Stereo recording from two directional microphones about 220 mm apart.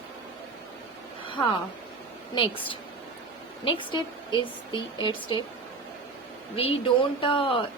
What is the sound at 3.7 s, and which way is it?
A woman's voice, 20° left (ahead or behind).